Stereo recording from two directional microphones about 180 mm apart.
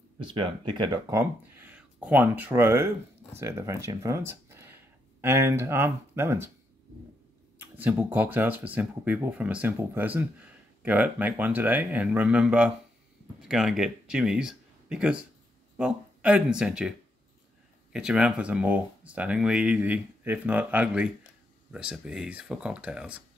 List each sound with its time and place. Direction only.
0.2 s speech: 25° right (ahead or behind)
1.2 s speech: 10° right (ahead or behind)
7.5 s speech: 10° right (ahead or behind)
17.9 s speech: 5° right (ahead or behind)